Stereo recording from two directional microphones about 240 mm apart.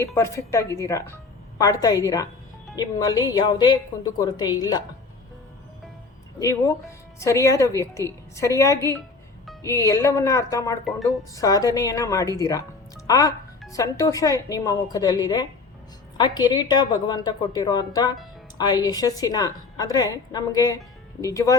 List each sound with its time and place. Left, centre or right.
0.0 s a woman's voice: centre
6.4 s a woman's voice: centre